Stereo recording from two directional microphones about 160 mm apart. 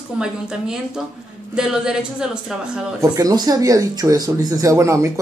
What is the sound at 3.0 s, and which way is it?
Speech, 20° right (ahead or behind).